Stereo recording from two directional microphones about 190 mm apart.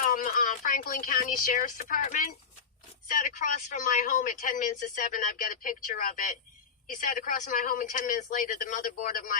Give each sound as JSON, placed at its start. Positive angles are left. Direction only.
{"t": 0.0, "sound": "speech", "side_deg": 45}